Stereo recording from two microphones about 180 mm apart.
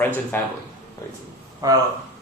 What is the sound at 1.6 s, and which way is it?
Speech, 20° right (ahead or behind).